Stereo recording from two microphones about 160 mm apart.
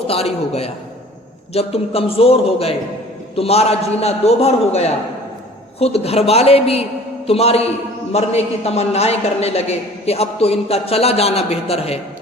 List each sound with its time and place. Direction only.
0.1 s a man's voice: 40° left (ahead or behind)